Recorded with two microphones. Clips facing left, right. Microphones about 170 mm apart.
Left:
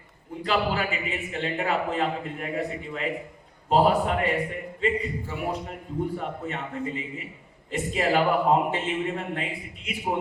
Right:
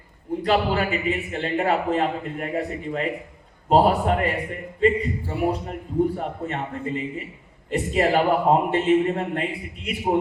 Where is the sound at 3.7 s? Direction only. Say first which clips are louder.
Right 3 dB; 40° right (ahead or behind).